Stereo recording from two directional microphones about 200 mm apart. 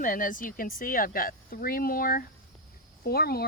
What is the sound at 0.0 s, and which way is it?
Speech, 45° left (ahead or behind).